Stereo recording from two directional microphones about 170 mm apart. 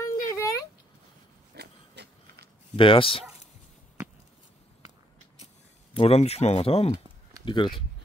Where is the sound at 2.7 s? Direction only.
30° left (ahead or behind).